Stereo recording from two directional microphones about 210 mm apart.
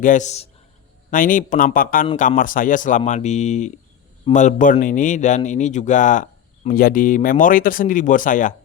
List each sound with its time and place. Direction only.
0.0 s a man's voice: 35° left (ahead or behind)